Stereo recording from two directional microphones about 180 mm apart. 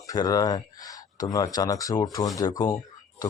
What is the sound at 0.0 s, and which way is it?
A man's voice, 20° left (ahead or behind).